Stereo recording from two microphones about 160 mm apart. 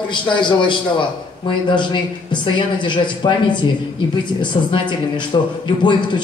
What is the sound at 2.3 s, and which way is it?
A man's voice, 30° left (ahead or behind).